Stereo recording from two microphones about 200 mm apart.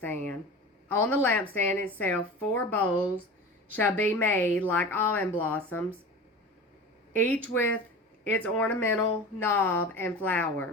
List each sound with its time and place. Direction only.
0.0 s speech: 10° left (ahead or behind)
7.1 s a woman's voice: 10° left (ahead or behind)